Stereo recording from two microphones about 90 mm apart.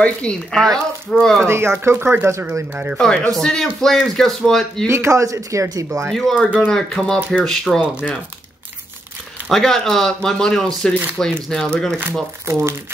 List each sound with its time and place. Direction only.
0.0 s speech: 10° left (ahead or behind)
1.4 s speech: 30° right (ahead or behind)
2.7 s speech: 15° right (ahead or behind)
3.0 s speech: 5° left (ahead or behind)
4.8 s speech: 30° right (ahead or behind)
6.1 s speech: 5° left (ahead or behind)
7.8 s speech: 15° left (ahead or behind)
9.5 s speech: 5° left (ahead or behind)
12.0 s speech: 30° right (ahead or behind)